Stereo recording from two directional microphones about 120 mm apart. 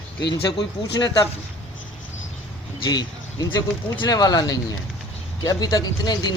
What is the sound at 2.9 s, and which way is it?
Speech, 35° left (ahead or behind).